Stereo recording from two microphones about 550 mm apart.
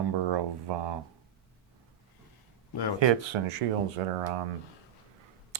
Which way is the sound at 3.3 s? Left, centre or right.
Right.